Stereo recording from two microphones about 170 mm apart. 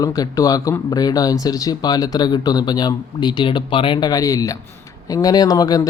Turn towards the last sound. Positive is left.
turn(degrees=20)  # may be behind; listen again after turning